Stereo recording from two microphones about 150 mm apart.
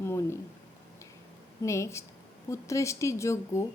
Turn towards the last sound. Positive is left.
turn(degrees=20)  # may be behind; listen again after turning